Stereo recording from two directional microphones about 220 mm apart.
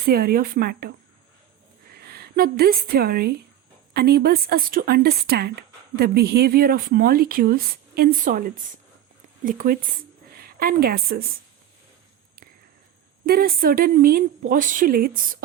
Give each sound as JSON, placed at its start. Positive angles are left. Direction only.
{"t": 0.0, "sound": "a woman's voice", "side_deg": -45}
{"t": 13.2, "sound": "speech", "side_deg": -45}